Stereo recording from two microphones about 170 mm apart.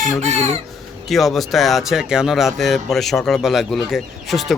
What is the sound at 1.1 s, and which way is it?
Speech, centre (ahead or behind).